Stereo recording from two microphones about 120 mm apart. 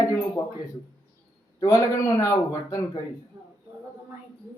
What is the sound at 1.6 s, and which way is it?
A man's voice, 25° left (ahead or behind).